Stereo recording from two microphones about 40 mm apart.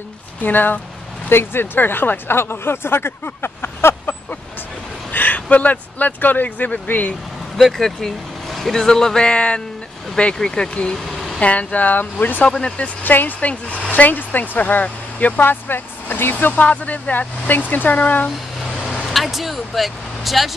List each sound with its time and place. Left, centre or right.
0.4 s speech: left
1.3 s speech: left
5.1 s speech: left
7.5 s speech: centre
8.8 s speech: centre
11.1 s vehicle: centre
11.3 s speech: left
12.4 s speech: left
13.0 s speech: left
13.4 s speech: left
13.9 s speech: left
15.4 s speech: left
16.6 s speech: left
19.0 s speech: centre